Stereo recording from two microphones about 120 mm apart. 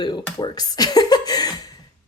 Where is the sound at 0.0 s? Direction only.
35° left (ahead or behind).